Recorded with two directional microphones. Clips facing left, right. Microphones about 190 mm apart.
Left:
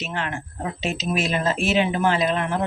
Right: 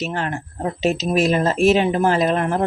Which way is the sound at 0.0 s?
40° right (ahead or behind).